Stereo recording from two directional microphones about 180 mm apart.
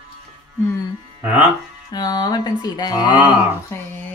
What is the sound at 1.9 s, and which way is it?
Speech, 20° left (ahead or behind).